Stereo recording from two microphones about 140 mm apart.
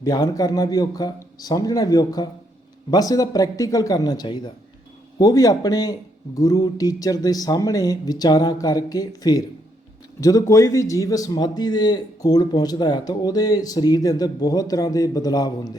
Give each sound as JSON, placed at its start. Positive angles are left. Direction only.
{"t": 0.0, "sound": "a man's voice", "side_deg": 25}